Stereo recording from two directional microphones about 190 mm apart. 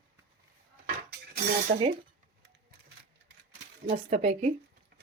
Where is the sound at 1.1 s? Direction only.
55° right (ahead or behind).